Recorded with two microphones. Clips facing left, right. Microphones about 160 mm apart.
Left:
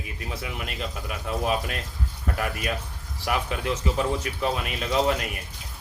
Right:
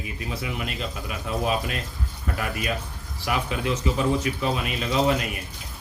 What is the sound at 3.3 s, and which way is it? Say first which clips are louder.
Speech: right 1 dB; 50° left (ahead or behind).